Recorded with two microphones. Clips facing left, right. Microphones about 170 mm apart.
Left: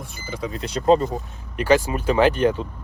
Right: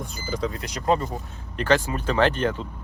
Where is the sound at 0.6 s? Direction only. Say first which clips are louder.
Left 8 dB; 30° left (ahead or behind).